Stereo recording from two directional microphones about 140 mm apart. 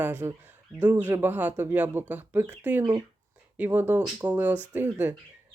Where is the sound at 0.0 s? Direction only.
15° right (ahead or behind).